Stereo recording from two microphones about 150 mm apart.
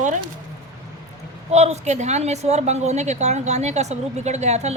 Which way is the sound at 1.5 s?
45° right (ahead or behind).